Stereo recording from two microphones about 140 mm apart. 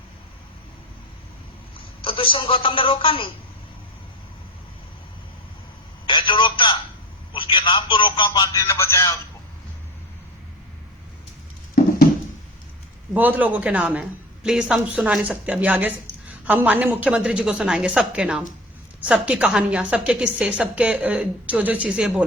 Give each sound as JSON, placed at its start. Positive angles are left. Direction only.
{"t": 2.0, "sound": "a woman's voice", "side_deg": 40}
{"t": 6.1, "sound": "telephone", "side_deg": 35}
{"t": 7.3, "sound": "a woman's voice", "side_deg": 35}
{"t": 8.6, "sound": "a man's voice", "side_deg": 20}
{"t": 11.8, "sound": "a sound", "side_deg": 90}
{"t": 13.1, "sound": "a woman's voice", "side_deg": -10}